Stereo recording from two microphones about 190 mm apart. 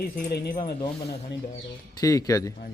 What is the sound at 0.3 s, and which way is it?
Speech, 55° left (ahead or behind).